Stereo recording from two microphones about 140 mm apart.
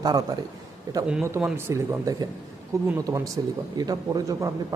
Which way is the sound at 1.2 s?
20° right (ahead or behind).